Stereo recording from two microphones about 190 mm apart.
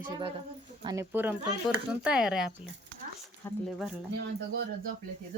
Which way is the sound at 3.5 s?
10° left (ahead or behind).